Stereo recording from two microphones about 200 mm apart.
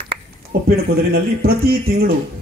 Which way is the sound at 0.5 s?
55° right (ahead or behind).